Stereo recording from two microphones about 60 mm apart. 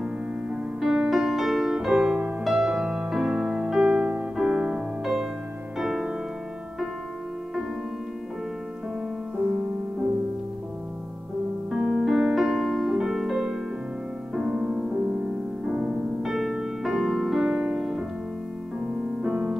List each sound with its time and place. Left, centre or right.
0.0 s music: centre
4.5 s piano: centre
5.0 s music: centre
11.7 s piano: centre
14.3 s music: centre
16.2 s music: centre
19.2 s music: centre